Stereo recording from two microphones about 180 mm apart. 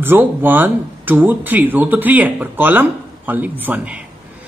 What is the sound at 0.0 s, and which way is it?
Speech, 10° right (ahead or behind).